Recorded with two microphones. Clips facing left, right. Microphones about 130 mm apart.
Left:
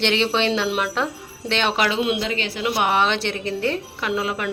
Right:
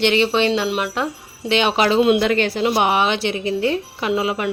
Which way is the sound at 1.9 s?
45° right (ahead or behind).